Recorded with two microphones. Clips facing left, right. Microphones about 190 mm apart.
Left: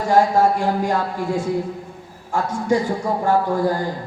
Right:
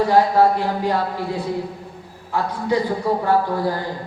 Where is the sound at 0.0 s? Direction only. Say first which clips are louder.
Right 1 dB; 45° left (ahead or behind).